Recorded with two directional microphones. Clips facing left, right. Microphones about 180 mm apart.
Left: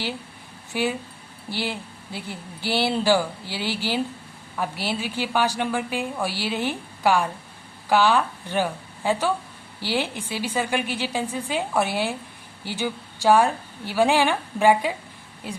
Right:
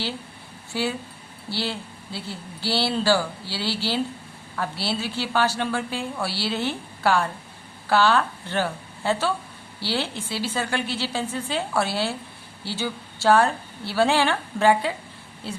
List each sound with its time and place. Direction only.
0.7 s a woman's voice: 15° left (ahead or behind)